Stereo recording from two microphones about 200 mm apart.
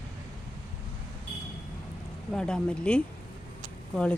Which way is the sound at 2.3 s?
5° left (ahead or behind).